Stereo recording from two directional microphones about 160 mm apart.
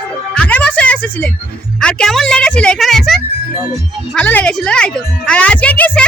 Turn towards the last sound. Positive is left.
turn(degrees=10)  # may be behind; listen again after turning